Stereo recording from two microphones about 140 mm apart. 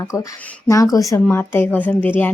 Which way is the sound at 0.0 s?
20° left (ahead or behind).